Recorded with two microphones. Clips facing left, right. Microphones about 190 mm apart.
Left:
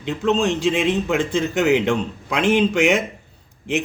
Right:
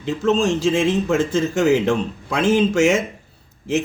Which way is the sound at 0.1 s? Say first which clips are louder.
Right 1 dB; centre (ahead or behind).